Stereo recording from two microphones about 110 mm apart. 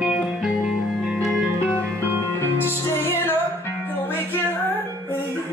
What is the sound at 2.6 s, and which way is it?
Music, 20° left (ahead or behind).